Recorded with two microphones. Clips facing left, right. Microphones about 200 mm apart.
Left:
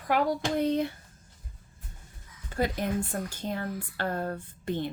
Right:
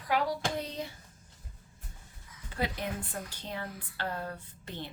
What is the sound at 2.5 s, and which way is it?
A woman's voice, 45° left (ahead or behind).